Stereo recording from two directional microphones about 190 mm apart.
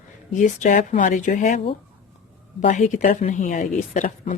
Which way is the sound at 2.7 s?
40° left (ahead or behind).